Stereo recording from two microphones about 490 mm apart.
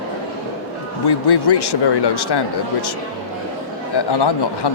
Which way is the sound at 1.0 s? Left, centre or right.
Left.